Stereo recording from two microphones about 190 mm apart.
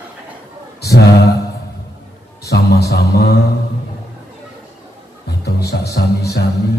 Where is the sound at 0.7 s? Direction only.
60° left (ahead or behind).